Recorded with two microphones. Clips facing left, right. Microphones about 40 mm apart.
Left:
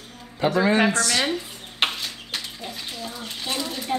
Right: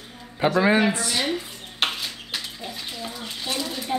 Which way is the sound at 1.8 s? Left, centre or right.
Centre.